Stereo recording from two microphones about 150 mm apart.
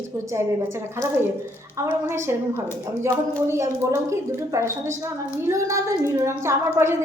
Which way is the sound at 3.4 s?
15° right (ahead or behind).